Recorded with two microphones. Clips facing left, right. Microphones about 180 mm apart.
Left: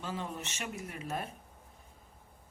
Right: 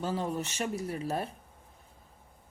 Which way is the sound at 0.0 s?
40° right (ahead or behind).